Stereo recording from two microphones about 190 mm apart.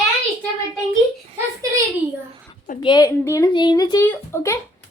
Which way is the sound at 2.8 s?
20° left (ahead or behind).